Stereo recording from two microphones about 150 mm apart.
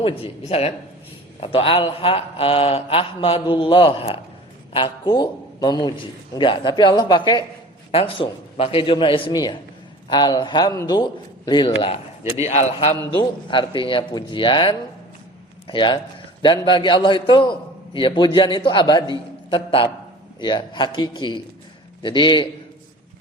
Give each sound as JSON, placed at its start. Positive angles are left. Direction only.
{"t": 0.0, "sound": "a man's voice", "side_deg": 40}
{"t": 12.4, "sound": "speech", "side_deg": 45}
{"t": 13.1, "sound": "a man's voice", "side_deg": 35}